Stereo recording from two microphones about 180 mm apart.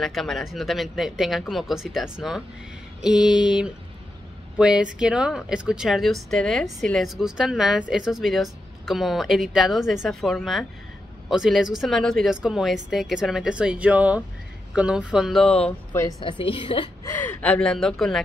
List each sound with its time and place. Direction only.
0.0 s a woman's voice: centre (ahead or behind)
16.2 s a woman's voice: 30° left (ahead or behind)
17.0 s a woman's voice: 10° left (ahead or behind)